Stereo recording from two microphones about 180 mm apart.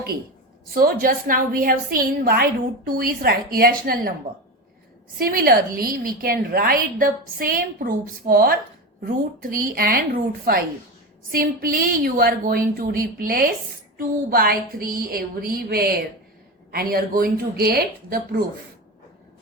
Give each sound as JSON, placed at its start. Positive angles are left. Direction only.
{"t": 0.7, "sound": "a woman's voice", "side_deg": -55}
{"t": 5.1, "sound": "a woman's voice", "side_deg": -55}